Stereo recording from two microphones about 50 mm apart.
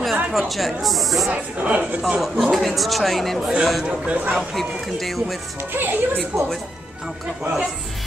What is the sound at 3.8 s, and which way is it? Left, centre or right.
Speech, right.